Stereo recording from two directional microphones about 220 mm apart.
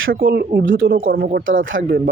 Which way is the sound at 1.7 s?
60° right (ahead or behind).